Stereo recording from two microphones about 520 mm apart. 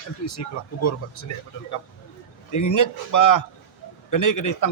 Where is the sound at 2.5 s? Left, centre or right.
Left.